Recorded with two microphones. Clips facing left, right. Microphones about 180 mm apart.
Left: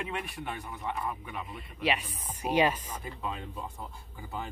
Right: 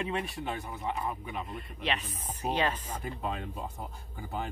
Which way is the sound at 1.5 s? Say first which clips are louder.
Left 5 dB; 5° left (ahead or behind).